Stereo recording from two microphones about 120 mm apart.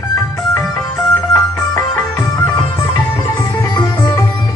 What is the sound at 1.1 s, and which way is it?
Music, 20° left (ahead or behind).